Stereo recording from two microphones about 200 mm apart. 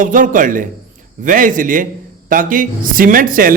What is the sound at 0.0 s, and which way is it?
A man's voice, 40° right (ahead or behind).